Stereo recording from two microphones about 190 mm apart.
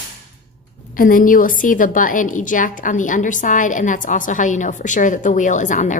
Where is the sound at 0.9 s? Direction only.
45° left (ahead or behind).